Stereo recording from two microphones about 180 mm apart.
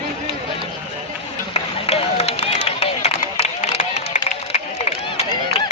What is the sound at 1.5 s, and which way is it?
Run, 35° left (ahead or behind).